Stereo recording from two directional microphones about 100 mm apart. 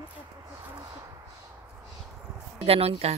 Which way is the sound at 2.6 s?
75° right (ahead or behind).